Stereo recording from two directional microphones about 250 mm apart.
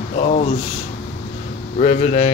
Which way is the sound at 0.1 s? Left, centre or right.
Left.